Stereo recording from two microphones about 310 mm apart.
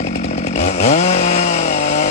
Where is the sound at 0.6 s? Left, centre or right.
Left.